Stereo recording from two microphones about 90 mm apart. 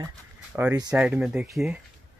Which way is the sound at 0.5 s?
15° right (ahead or behind).